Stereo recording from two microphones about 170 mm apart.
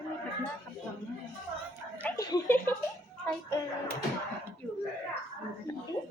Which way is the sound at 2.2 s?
15° left (ahead or behind).